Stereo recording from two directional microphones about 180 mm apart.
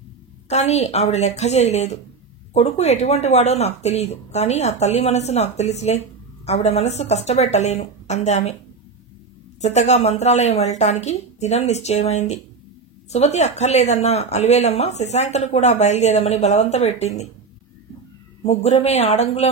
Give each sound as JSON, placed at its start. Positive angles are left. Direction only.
{"t": 0.5, "sound": "speech", "side_deg": 35}
{"t": 9.6, "sound": "speech", "side_deg": 40}
{"t": 18.4, "sound": "speech", "side_deg": 35}